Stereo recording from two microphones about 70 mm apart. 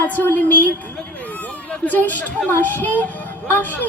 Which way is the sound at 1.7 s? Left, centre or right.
Left.